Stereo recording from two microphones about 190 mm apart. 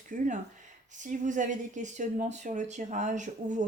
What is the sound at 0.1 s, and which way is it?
Speech, 40° right (ahead or behind).